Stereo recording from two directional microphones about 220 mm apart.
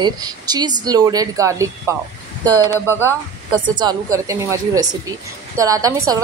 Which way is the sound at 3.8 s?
15° right (ahead or behind).